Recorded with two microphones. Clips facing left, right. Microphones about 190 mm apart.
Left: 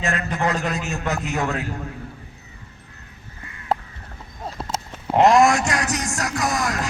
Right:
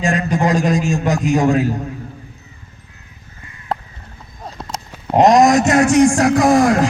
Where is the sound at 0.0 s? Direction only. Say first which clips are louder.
Right 6 dB; 15° right (ahead or behind).